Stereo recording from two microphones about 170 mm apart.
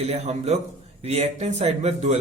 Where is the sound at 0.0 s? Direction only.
40° right (ahead or behind).